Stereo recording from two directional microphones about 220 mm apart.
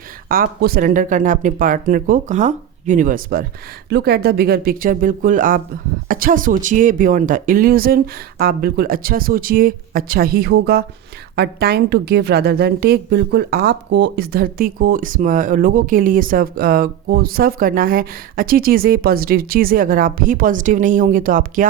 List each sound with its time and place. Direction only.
0.3 s a woman's voice: 40° right (ahead or behind)